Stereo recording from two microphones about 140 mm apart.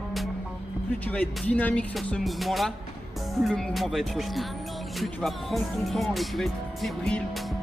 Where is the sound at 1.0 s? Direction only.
10° left (ahead or behind).